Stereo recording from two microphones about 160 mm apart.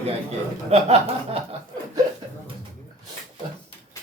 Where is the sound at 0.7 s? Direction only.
40° right (ahead or behind).